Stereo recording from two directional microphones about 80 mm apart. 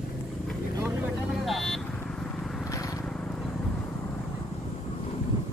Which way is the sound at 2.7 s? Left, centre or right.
Left.